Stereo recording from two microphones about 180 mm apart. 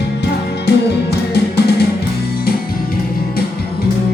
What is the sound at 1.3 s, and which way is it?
Music, 65° left (ahead or behind).